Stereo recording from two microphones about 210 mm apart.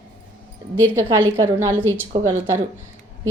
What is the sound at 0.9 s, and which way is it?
A woman's voice, 15° right (ahead or behind).